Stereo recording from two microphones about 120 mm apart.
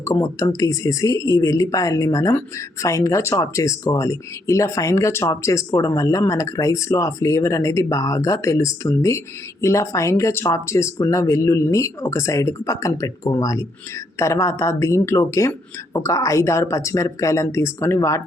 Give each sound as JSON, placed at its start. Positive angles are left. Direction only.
{"t": 0.0, "sound": "speech", "side_deg": 25}